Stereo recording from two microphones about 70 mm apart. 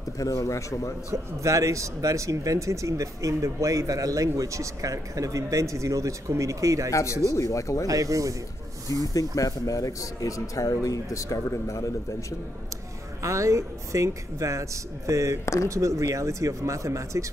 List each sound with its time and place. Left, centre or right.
0.2 s speech: left
1.1 s speech: right
6.9 s speech: left
7.8 s speech: right
9.1 s speech: left
13.2 s speech: right
15.4 s speech: left
15.7 s speech: right